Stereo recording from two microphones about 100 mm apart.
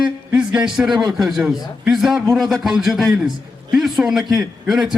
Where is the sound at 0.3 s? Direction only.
10° right (ahead or behind).